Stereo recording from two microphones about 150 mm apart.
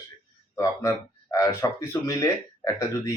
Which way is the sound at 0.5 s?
25° left (ahead or behind).